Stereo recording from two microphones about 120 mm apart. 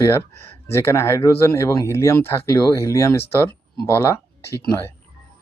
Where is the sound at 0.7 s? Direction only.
20° left (ahead or behind).